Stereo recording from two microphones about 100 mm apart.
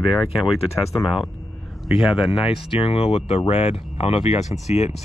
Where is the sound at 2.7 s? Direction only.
70° left (ahead or behind).